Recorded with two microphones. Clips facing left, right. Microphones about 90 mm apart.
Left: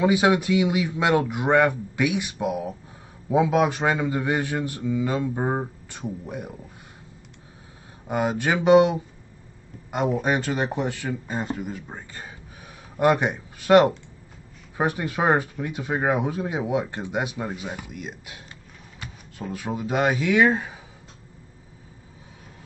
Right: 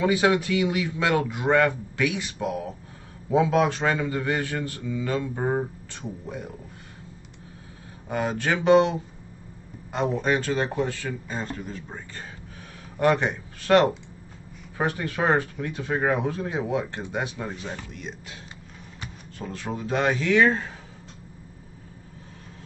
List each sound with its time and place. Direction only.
0.0 s a man's voice: 15° left (ahead or behind)
8.1 s a man's voice: 15° left (ahead or behind)